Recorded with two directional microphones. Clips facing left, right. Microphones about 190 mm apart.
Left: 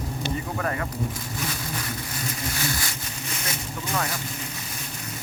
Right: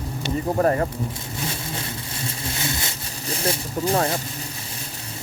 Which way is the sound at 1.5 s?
25° right (ahead or behind).